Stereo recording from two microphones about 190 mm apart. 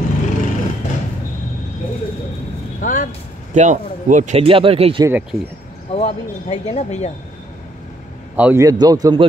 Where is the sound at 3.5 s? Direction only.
40° right (ahead or behind).